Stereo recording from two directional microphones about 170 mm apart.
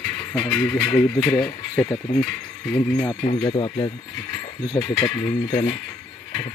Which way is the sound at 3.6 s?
30° left (ahead or behind).